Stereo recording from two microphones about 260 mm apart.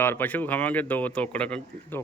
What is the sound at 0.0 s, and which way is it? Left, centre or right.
Speech, centre.